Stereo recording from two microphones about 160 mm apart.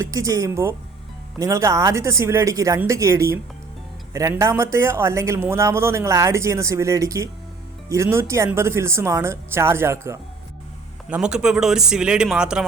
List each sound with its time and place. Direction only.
0.0 s speech: 20° right (ahead or behind)
11.1 s speech: 5° right (ahead or behind)